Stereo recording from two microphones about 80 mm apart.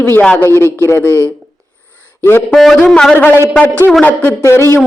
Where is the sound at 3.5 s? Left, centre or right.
Centre.